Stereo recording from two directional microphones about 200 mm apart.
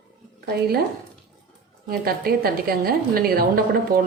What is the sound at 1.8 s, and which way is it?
A woman's voice, 50° right (ahead or behind).